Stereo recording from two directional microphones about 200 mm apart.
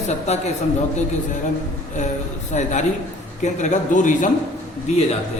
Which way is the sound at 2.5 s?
35° left (ahead or behind).